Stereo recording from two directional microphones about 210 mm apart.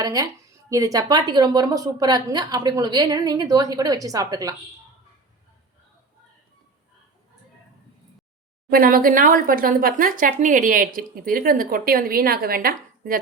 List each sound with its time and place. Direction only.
0.0 s a woman's voice: 15° right (ahead or behind)
8.7 s speech: 45° right (ahead or behind)